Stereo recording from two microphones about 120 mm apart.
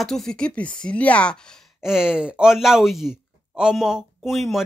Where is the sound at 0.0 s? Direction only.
5° left (ahead or behind).